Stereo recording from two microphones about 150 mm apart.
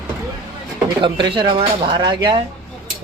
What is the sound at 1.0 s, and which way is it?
Speech, 35° right (ahead or behind).